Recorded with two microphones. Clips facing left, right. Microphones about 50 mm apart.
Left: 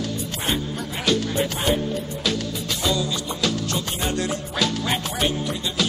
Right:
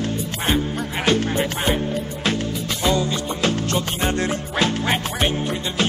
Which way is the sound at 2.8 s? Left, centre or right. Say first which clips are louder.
Right 4 dB; right.